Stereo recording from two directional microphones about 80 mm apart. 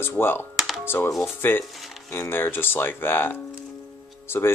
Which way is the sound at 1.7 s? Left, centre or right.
Centre.